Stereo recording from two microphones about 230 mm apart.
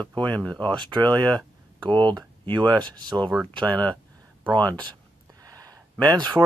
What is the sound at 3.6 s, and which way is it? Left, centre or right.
Speech, centre.